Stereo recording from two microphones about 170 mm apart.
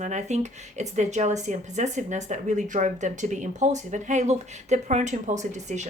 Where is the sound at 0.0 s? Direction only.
45° right (ahead or behind).